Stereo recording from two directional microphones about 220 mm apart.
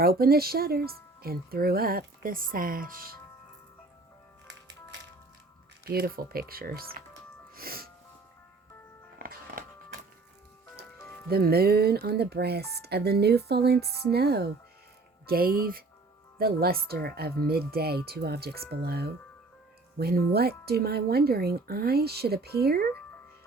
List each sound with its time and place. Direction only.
0.0 s speech: 45° right (ahead or behind)
5.8 s speech: 45° right (ahead or behind)
7.5 s music: 40° right (ahead or behind)
9.1 s music: 40° right (ahead or behind)
11.3 s speech: 45° right (ahead or behind)